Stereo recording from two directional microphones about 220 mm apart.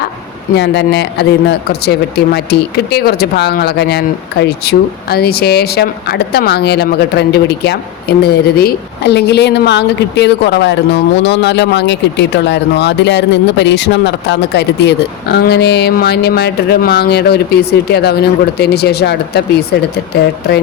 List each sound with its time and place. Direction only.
0.5 s speech: 50° left (ahead or behind)